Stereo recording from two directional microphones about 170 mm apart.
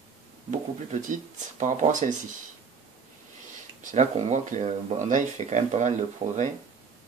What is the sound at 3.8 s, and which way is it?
Speech, 45° right (ahead or behind).